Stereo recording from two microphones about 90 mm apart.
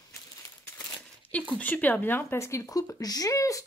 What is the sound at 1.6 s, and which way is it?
Speech, 20° left (ahead or behind).